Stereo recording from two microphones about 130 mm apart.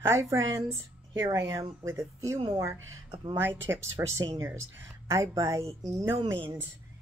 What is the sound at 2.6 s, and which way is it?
A woman's voice, 20° right (ahead or behind).